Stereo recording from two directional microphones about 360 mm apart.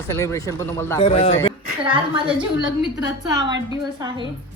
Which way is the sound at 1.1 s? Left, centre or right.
Centre.